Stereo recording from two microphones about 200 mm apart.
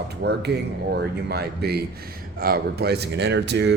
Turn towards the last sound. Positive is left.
turn(degrees=-60)  # may be behind; listen again after turning